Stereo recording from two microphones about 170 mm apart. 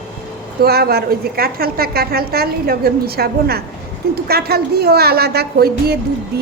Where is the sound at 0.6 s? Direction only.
65° right (ahead or behind).